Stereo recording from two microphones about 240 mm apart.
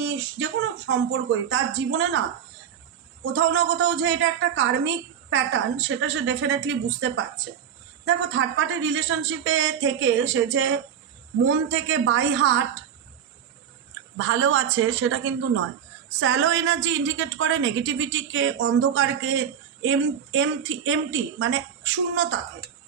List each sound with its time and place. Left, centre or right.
0.0 s speech: right
3.3 s a woman's voice: right
8.0 s a woman's voice: right
14.2 s a man's voice: right